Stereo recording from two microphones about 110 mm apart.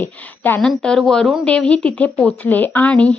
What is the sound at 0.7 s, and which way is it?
Speech, 5° left (ahead or behind).